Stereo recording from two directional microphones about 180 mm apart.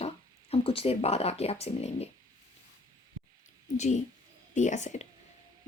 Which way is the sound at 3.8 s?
40° left (ahead or behind).